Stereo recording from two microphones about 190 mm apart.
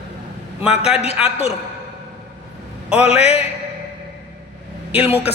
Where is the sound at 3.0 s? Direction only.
35° left (ahead or behind).